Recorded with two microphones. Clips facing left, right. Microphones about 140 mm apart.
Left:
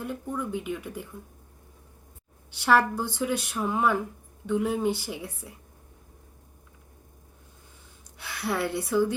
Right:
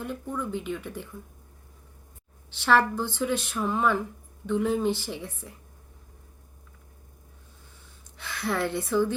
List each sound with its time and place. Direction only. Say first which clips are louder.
0.0 s speech: even; 5° left (ahead or behind)
2.5 s speech: even; 10° left (ahead or behind)
8.2 s speech: right 1 dB; 10° left (ahead or behind)